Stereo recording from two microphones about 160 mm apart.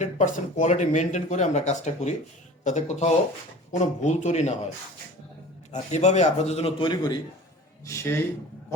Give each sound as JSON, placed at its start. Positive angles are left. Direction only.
{"t": 0.0, "sound": "speech", "side_deg": 50}
{"t": 5.7, "sound": "a man's voice", "side_deg": 45}